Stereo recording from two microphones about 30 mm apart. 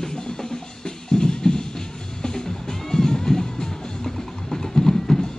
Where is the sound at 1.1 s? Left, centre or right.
Left.